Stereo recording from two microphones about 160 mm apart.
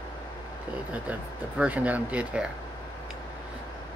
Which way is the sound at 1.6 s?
10° right (ahead or behind).